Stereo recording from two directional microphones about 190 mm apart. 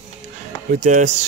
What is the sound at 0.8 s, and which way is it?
Speech, 40° right (ahead or behind).